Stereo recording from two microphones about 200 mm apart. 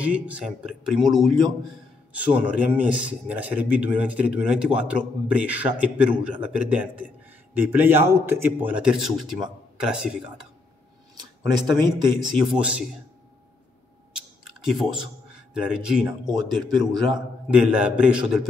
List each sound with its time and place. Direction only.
0.0 s a man's voice: 5° right (ahead or behind)
11.5 s speech: 20° right (ahead or behind)
12.3 s speech: 5° right (ahead or behind)
14.1 s a sound: 5° right (ahead or behind)
16.7 s speech: 20° right (ahead or behind)
17.5 s speech: 5° right (ahead or behind)